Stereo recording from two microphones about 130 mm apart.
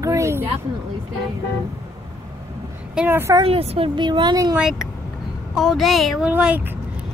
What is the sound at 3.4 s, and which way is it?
Speech, 50° right (ahead or behind).